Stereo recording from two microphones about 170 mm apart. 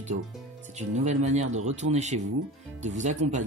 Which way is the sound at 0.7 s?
45° right (ahead or behind).